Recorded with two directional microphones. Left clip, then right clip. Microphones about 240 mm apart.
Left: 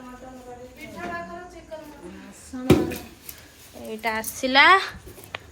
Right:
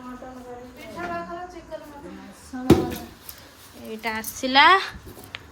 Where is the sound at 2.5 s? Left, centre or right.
Centre.